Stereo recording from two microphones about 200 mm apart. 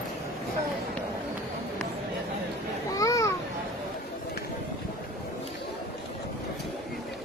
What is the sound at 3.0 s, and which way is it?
Children playing, 15° left (ahead or behind).